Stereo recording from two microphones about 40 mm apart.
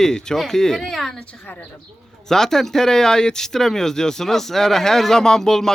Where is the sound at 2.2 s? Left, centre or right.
Centre.